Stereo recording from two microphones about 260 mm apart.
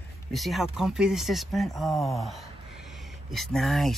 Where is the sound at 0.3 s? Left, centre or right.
Centre.